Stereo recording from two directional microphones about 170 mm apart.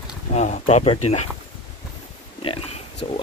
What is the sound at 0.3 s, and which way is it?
Speech, 40° left (ahead or behind).